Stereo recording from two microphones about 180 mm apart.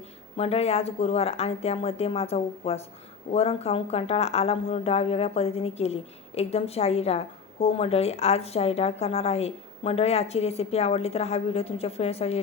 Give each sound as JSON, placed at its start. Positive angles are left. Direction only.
{"t": 0.3, "sound": "speech", "side_deg": 35}